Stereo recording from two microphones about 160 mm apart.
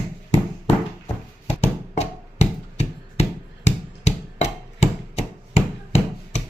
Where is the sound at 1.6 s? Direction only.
40° left (ahead or behind).